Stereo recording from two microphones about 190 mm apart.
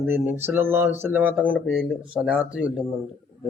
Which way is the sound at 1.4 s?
5° left (ahead or behind).